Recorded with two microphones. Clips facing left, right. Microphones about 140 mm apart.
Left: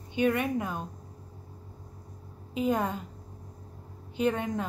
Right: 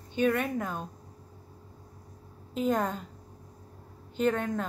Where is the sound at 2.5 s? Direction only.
5° left (ahead or behind).